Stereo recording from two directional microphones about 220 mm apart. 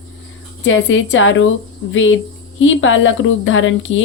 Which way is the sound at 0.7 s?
60° left (ahead or behind).